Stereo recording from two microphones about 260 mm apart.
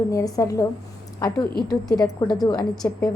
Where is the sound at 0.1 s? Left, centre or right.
Centre.